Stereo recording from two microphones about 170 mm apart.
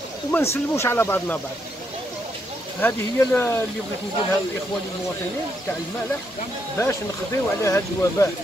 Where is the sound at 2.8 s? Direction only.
10° left (ahead or behind).